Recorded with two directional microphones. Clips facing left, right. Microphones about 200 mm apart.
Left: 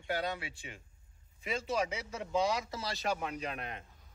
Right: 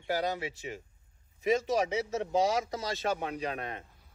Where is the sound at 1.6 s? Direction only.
40° right (ahead or behind).